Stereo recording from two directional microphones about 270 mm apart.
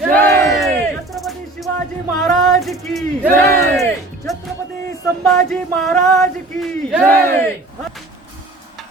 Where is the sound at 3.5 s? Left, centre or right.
Centre.